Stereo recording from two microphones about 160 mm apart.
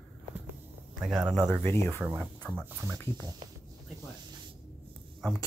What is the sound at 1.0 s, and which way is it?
Speech, 5° right (ahead or behind).